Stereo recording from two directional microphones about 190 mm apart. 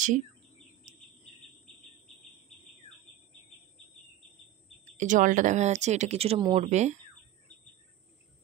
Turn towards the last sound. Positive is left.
turn(degrees=-40)  # may be behind; listen again after turning